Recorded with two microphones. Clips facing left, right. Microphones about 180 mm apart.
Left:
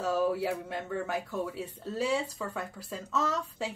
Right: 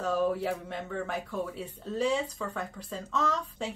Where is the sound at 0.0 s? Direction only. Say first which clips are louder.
Even; 5° left (ahead or behind).